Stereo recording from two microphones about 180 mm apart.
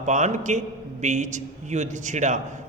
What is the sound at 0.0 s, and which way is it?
A man's voice, 40° right (ahead or behind).